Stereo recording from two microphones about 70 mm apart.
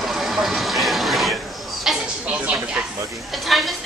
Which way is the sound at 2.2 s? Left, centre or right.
Centre.